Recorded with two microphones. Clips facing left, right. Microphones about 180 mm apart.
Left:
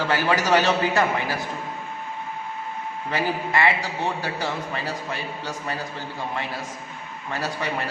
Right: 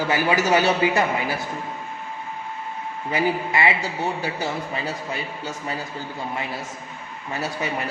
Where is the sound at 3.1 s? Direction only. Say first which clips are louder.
Right 2 dB; 15° right (ahead or behind).